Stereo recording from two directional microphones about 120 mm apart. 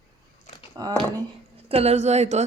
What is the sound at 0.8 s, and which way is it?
Speech, 35° right (ahead or behind).